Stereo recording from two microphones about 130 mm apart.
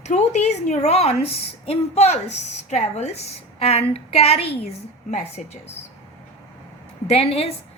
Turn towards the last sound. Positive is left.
turn(degrees=50)  # may be behind; listen again after turning